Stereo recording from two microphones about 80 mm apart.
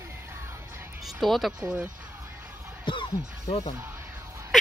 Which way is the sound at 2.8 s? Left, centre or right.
Left.